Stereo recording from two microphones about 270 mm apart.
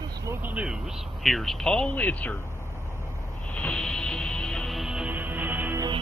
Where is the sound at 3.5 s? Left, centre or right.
Centre.